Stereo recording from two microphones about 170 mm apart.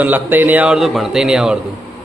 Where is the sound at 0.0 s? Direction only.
10° right (ahead or behind).